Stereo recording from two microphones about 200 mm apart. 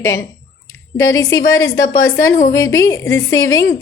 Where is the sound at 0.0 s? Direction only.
15° left (ahead or behind).